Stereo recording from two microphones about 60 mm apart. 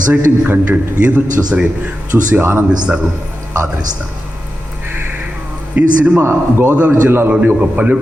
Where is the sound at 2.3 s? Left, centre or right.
Right.